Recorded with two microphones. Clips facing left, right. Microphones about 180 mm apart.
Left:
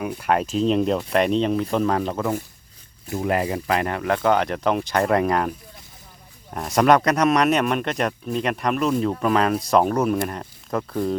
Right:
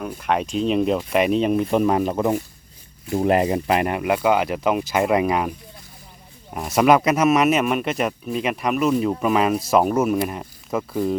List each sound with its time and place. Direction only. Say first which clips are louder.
0.0 s speech: left 1 dB; 5° left (ahead or behind); by 2.4 s 15° right (ahead or behind)
3.1 s speech: right 4 dB; 30° right (ahead or behind); by 11.2 s 5° right (ahead or behind)